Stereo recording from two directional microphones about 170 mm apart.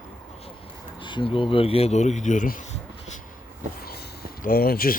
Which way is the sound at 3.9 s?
60° left (ahead or behind).